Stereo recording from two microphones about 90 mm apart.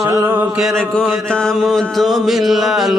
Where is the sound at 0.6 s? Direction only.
5° left (ahead or behind).